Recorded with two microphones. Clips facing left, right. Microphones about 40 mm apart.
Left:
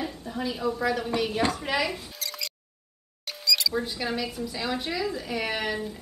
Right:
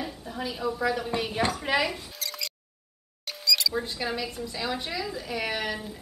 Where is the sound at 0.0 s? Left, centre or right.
Centre.